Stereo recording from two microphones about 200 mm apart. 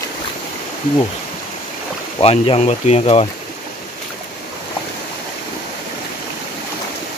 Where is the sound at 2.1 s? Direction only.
30° left (ahead or behind).